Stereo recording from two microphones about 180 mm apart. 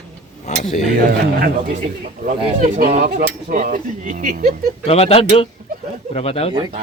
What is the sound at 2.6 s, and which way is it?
Speech, 45° right (ahead or behind).